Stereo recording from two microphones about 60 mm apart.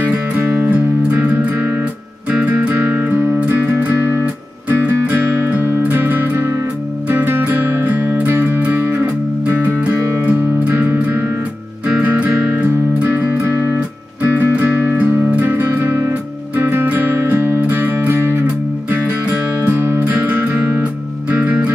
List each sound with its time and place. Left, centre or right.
0.4 s music: right
1.2 s music: right
9.0 s music: right
11.9 s music: right
14.4 s music: right
17.2 s music: right
20.1 s music: right